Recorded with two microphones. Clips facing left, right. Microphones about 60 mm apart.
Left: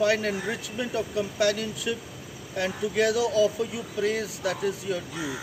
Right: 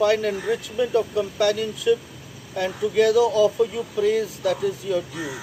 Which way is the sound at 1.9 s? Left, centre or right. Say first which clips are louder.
Right 10 dB; centre.